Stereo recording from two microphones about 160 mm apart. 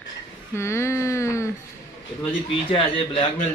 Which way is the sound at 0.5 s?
15° left (ahead or behind).